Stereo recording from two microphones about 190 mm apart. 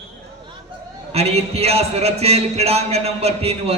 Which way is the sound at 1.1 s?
35° right (ahead or behind).